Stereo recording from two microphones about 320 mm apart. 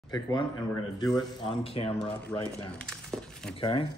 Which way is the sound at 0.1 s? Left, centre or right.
Centre.